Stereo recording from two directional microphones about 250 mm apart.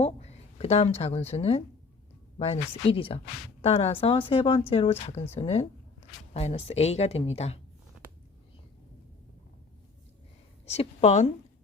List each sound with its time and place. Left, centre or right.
0.0 s speech: left
10.7 s speech: left